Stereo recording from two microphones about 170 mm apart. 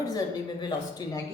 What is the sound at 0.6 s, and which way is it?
Speech, 25° left (ahead or behind).